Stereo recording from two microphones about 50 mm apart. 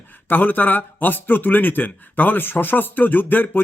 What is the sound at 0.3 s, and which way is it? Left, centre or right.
A man's voice, left.